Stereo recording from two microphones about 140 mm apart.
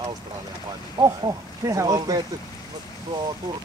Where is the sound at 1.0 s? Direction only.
25° right (ahead or behind).